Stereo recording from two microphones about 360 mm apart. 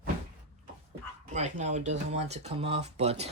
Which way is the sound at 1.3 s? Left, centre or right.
Centre.